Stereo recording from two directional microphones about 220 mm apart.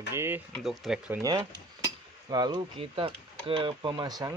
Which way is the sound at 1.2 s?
20° right (ahead or behind).